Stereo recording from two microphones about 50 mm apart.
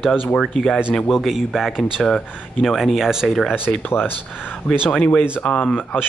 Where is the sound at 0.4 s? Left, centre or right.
Centre.